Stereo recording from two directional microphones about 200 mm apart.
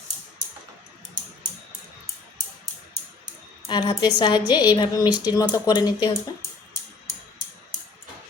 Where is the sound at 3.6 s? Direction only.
20° left (ahead or behind).